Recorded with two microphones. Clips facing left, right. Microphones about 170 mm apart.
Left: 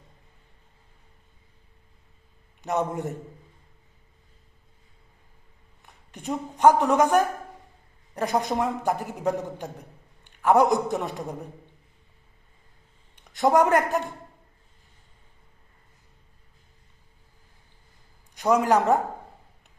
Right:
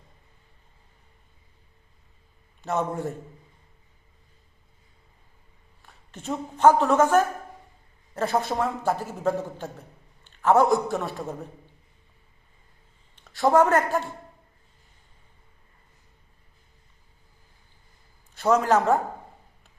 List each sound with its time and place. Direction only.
2.6 s a man's voice: 20° left (ahead or behind)
5.8 s a man's voice: 15° left (ahead or behind)
13.1 s a man's voice: 15° left (ahead or behind)
18.3 s a man's voice: 15° left (ahead or behind)